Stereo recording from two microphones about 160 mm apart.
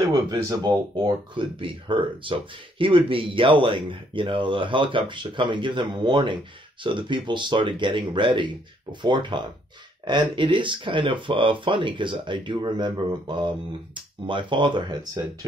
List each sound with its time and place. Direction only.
0.3 s speech: 25° right (ahead or behind)